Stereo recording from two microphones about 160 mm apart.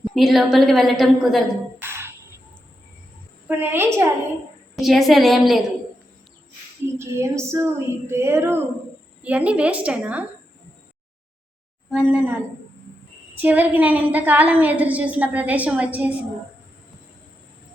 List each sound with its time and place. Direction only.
0.0 s a woman's voice: centre (ahead or behind)
1.8 s music: 15° right (ahead or behind)
3.4 s a woman's voice: 10° right (ahead or behind)
4.8 s a woman's voice: centre (ahead or behind)
6.8 s a woman's voice: 15° right (ahead or behind)
11.9 s a woman's voice: 10° right (ahead or behind)
13.4 s a woman's voice: 10° right (ahead or behind)